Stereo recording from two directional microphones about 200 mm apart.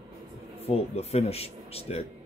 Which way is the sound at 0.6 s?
30° left (ahead or behind).